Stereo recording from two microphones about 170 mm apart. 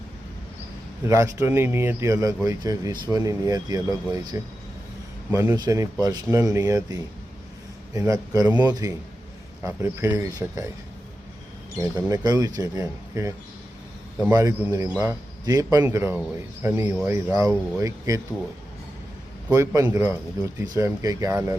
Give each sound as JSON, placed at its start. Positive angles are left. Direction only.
{"t": 1.0, "sound": "a man's voice", "side_deg": -15}
{"t": 11.8, "sound": "a man's voice", "side_deg": -20}
{"t": 19.5, "sound": "a man's voice", "side_deg": -20}